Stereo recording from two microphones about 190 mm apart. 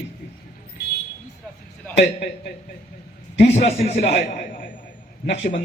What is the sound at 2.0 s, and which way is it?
Speech, 60° left (ahead or behind).